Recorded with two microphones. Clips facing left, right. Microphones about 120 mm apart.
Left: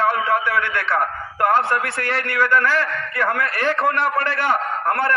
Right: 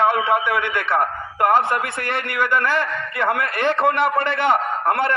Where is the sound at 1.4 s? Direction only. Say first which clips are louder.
Right 1 dB; 15° right (ahead or behind).